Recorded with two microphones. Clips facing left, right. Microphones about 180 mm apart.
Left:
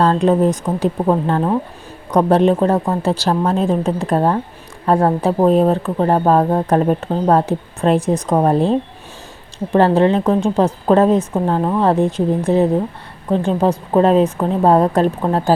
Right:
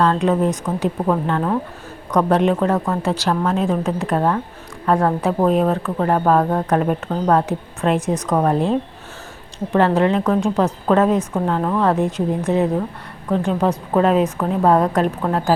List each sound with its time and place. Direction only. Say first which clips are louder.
0.0 s a woman's voice: left 3 dB; 35° left (ahead or behind)